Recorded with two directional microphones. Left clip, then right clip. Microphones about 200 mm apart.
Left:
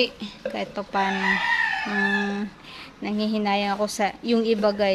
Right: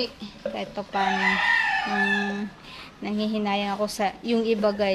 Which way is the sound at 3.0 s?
15° left (ahead or behind).